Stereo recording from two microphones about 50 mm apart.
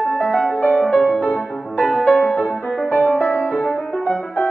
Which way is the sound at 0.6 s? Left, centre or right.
Left.